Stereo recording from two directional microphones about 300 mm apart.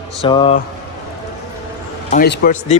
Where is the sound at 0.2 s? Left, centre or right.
Centre.